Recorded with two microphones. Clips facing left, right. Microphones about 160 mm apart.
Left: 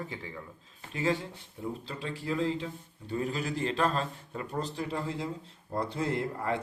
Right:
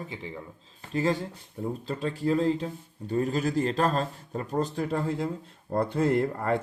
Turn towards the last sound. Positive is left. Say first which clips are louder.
# right 6 dB
turn(degrees=-50)  # may be behind; listen again after turning